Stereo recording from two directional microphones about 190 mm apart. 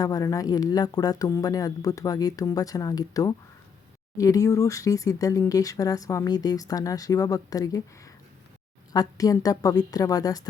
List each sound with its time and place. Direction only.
0.0 s speech: 20° left (ahead or behind)